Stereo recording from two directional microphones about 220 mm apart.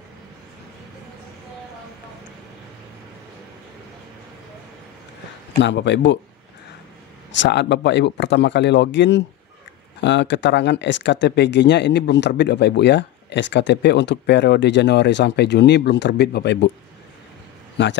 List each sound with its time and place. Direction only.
5.6 s speech: 55° left (ahead or behind)
7.3 s speech: 50° left (ahead or behind)
17.8 s speech: 55° left (ahead or behind)